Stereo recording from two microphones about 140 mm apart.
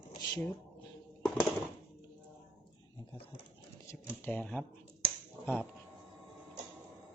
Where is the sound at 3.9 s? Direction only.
15° left (ahead or behind).